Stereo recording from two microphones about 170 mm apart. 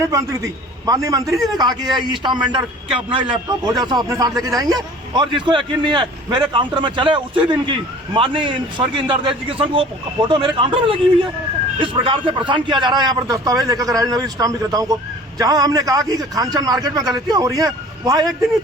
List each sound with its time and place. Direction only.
0.0 s a man's voice: 20° right (ahead or behind)